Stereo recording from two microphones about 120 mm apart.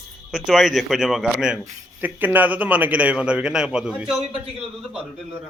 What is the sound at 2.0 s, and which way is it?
A man's voice, 15° right (ahead or behind).